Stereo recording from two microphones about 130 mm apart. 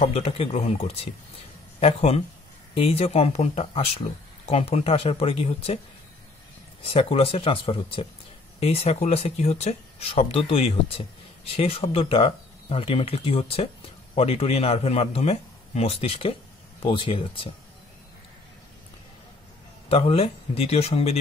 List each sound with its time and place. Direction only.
0.0 s speech: 55° left (ahead or behind)
6.8 s speech: 45° left (ahead or behind)
19.9 s speech: 50° left (ahead or behind)